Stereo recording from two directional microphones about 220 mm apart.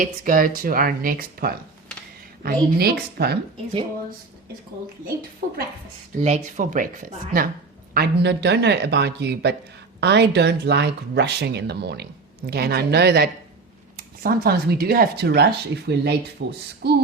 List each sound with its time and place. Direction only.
0.0 s speech: 40° right (ahead or behind)
6.2 s speech: 30° right (ahead or behind)
7.9 s speech: 50° right (ahead or behind)